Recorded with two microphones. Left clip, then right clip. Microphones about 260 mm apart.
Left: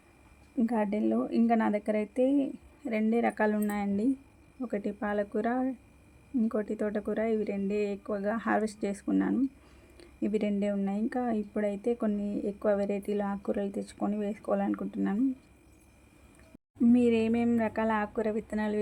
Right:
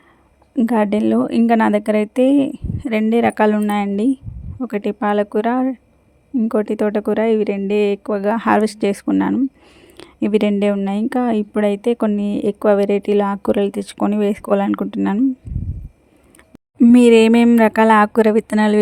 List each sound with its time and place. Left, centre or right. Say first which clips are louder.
0.5 s a woman's voice: right 13 dB; right
16.8 s a woman's voice: right 16 dB; right